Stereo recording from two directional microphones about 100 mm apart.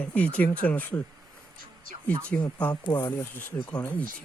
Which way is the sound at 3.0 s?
25° left (ahead or behind).